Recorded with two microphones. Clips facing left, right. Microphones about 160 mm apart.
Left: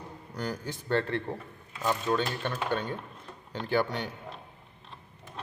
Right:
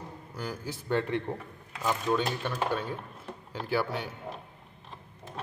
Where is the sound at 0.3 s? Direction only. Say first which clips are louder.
Left 2 dB; 5° right (ahead or behind).